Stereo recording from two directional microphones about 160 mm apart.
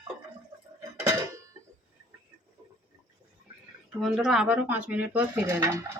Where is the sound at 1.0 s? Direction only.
20° right (ahead or behind).